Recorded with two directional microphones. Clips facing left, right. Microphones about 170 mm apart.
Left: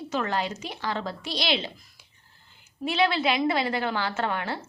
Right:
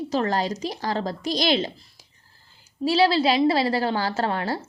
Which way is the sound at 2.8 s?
35° right (ahead or behind).